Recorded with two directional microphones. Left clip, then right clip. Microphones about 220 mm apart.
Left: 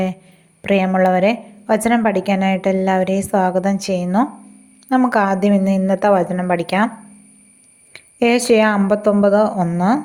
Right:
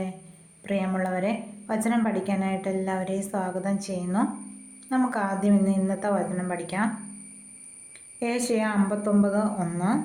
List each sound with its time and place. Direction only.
0.6 s a woman's voice: 40° left (ahead or behind)
7.9 s a woman's voice: 40° left (ahead or behind)